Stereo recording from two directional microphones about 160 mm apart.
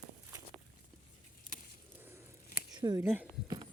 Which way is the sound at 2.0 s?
15° right (ahead or behind).